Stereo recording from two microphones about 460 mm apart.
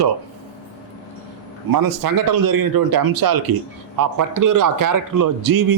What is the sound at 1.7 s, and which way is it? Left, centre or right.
A man's voice, right.